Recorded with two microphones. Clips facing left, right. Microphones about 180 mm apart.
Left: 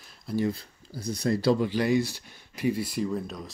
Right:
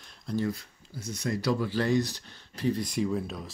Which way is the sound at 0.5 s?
35° left (ahead or behind).